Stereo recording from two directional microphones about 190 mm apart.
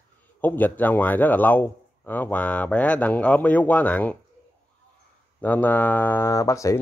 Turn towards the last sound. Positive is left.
turn(degrees=15)  # may be behind; listen again after turning